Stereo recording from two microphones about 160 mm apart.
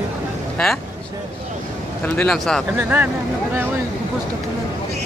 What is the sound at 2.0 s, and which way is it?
Speech, 5° left (ahead or behind).